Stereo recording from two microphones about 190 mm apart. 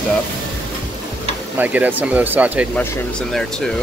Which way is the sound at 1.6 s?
10° right (ahead or behind).